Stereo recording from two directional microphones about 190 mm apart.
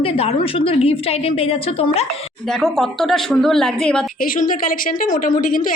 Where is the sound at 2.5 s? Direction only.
Centre (ahead or behind).